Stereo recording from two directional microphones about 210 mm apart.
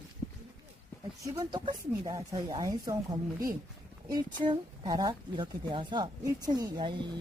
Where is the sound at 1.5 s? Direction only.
20° right (ahead or behind).